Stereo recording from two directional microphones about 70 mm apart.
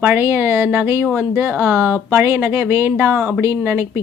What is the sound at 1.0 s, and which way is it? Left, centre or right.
Speech, centre.